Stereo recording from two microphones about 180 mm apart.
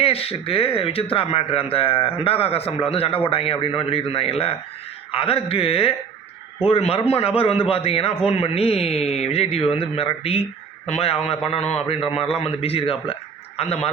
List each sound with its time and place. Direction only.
0.0 s speech: 35° left (ahead or behind)